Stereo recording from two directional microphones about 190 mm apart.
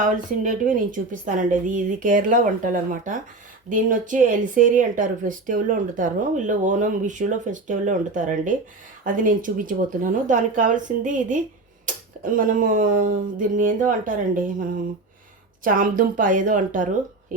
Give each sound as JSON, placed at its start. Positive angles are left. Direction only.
{"t": 0.0, "sound": "speech", "side_deg": -45}